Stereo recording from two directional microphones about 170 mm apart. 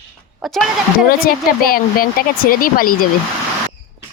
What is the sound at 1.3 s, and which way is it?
Speech, 60° left (ahead or behind).